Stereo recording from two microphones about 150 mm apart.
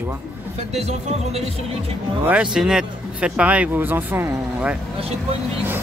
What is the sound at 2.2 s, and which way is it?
Speech, 5° right (ahead or behind).